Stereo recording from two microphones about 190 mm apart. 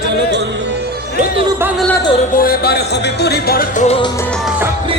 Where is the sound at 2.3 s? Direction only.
55° left (ahead or behind).